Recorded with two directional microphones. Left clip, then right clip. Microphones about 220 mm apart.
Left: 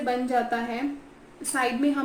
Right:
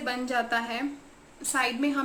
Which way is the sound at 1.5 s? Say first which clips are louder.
Left 1 dB; 20° right (ahead or behind).